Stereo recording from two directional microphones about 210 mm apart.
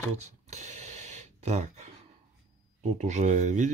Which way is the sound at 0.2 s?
35° right (ahead or behind).